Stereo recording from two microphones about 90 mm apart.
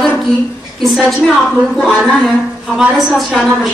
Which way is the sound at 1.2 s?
5° left (ahead or behind).